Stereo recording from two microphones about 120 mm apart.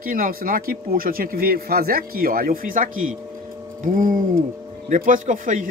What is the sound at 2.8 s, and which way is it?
Speech, 90° right.